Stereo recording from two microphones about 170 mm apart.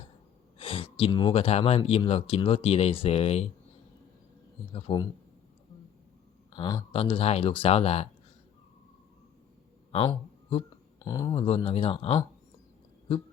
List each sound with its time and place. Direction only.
0.6 s speech: 35° left (ahead or behind)
4.7 s speech: 25° left (ahead or behind)
6.6 s speech: 20° left (ahead or behind)
6.9 s speech: 35° left (ahead or behind)
9.9 s a sound: 30° left (ahead or behind)
11.0 s speech: 20° left (ahead or behind)
11.3 s speech: 35° left (ahead or behind)